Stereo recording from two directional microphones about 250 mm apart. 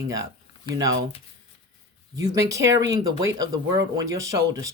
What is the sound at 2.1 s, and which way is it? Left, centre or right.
Speech, centre.